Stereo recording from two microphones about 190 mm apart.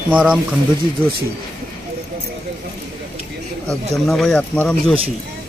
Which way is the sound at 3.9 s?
Centre (ahead or behind).